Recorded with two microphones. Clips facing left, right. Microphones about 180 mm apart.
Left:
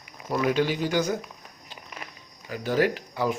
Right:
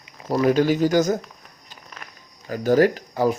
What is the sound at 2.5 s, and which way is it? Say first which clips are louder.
Speech: right 7 dB; 45° right (ahead or behind).